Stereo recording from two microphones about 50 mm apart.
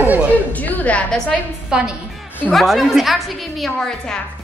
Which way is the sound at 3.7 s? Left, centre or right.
Centre.